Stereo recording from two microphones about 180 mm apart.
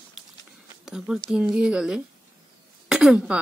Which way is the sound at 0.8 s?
5° right (ahead or behind).